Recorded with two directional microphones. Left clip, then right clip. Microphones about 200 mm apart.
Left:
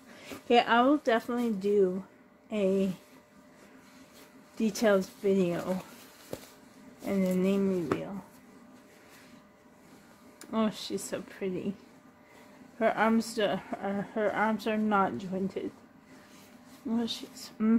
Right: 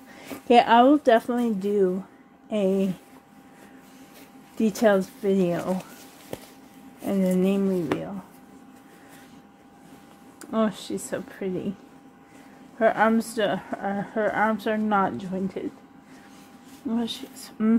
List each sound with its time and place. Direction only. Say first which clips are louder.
0.5 s a woman's voice: right 7 dB; 30° right (ahead or behind)
4.6 s a woman's voice: right 5 dB; 25° right (ahead or behind)
7.1 s a woman's voice: right 5 dB; 20° right (ahead or behind)
10.4 s speech: right 6 dB; 15° right (ahead or behind)
12.7 s speech: right 6 dB; 15° right (ahead or behind)
16.9 s speech: right 3 dB; 15° right (ahead or behind)